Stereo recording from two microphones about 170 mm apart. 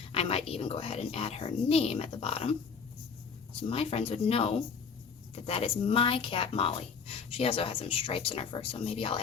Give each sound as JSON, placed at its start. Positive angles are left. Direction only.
{"t": 0.1, "sound": "a woman's voice", "side_deg": 35}
{"t": 3.6, "sound": "a woman's voice", "side_deg": 35}